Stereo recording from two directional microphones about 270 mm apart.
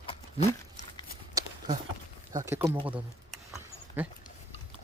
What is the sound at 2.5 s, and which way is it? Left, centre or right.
Speech, centre.